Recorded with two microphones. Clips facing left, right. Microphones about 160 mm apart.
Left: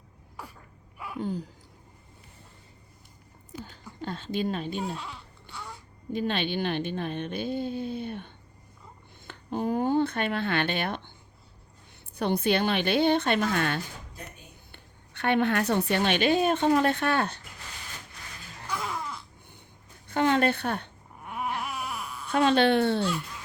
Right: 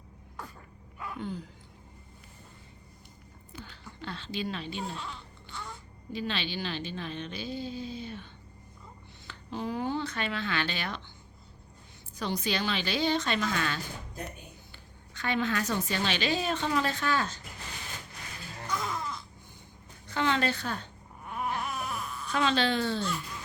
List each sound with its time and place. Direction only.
0.9 s a sound: 5° left (ahead or behind)
1.2 s a sound: 40° left (ahead or behind)
3.6 s a sound: 45° left (ahead or behind)
4.9 s babbling: 10° left (ahead or behind)
6.1 s a woman's voice: 50° left (ahead or behind)
12.1 s a woman's voice: 55° left (ahead or behind)
18.7 s music: 10° left (ahead or behind)
20.1 s a woman's voice: 50° left (ahead or behind)
21.2 s baby cry: 15° left (ahead or behind)
22.3 s a woman's voice: 55° left (ahead or behind)